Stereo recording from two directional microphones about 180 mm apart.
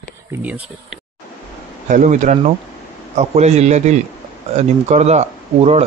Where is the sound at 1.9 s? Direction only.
45° right (ahead or behind).